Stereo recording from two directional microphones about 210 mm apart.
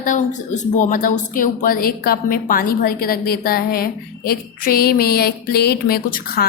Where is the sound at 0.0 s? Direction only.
35° left (ahead or behind).